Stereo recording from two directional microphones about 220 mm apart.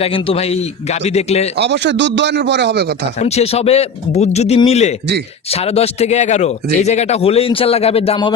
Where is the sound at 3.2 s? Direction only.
30° left (ahead or behind).